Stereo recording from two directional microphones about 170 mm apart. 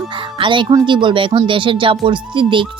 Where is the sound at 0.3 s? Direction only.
30° right (ahead or behind).